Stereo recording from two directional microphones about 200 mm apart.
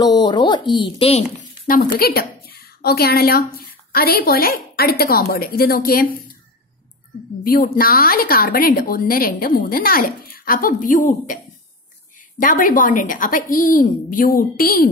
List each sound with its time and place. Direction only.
0.0 s a woman's voice: 20° left (ahead or behind)
1.7 s a woman's voice: 45° left (ahead or behind)
7.4 s a woman's voice: 45° left (ahead or behind)
12.4 s a woman's voice: 45° left (ahead or behind)